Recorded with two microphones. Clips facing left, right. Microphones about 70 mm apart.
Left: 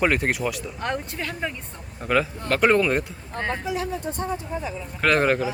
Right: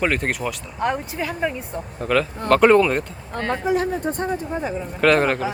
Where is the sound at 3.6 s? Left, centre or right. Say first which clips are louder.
Right 6 dB; right.